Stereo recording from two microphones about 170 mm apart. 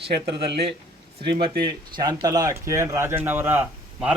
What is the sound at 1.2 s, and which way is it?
A man's voice, 30° right (ahead or behind).